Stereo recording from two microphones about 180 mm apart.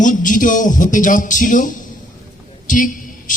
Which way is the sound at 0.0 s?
45° left (ahead or behind).